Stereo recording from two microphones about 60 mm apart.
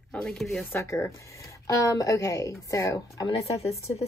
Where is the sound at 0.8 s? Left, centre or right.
Left.